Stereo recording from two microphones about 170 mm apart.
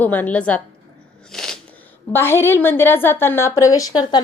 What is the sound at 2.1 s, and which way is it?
A woman's voice, 15° left (ahead or behind).